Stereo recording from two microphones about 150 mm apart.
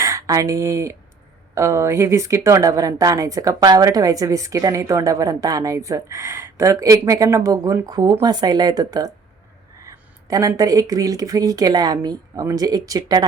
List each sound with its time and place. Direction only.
0.0 s a woman's voice: 20° right (ahead or behind)
9.8 s a sound: 25° right (ahead or behind)
10.6 s a woman's voice: 25° right (ahead or behind)